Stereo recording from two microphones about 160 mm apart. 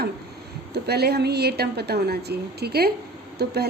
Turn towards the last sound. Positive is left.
turn(degrees=-90)